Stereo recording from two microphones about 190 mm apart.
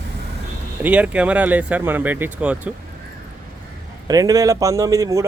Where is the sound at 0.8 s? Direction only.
5° right (ahead or behind).